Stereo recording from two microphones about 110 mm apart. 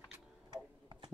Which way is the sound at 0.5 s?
45° right (ahead or behind).